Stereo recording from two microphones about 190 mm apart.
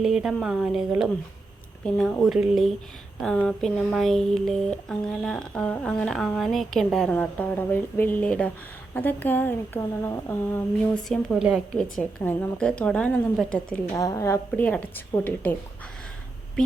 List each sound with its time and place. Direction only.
0.0 s speech: centre (ahead or behind)
11.1 s speech: centre (ahead or behind)
13.9 s a woman's voice: 15° left (ahead or behind)